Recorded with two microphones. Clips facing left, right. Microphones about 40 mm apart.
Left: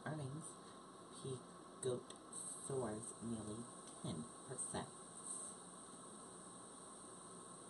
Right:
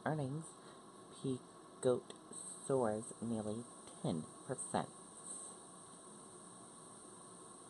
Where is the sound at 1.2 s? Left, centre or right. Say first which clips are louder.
Right 8 dB; right.